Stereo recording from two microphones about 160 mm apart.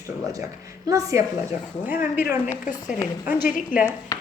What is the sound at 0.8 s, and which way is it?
A woman's voice, 20° right (ahead or behind).